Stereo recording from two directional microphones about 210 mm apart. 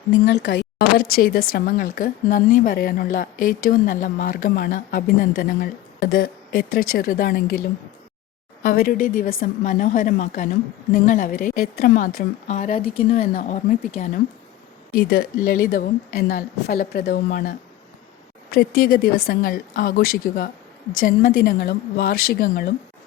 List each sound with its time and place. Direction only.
0.1 s a woman's voice: 55° left (ahead or behind)
8.6 s a woman's voice: 45° left (ahead or behind)
14.9 s a woman's voice: 45° left (ahead or behind)
18.5 s a woman's voice: 45° left (ahead or behind)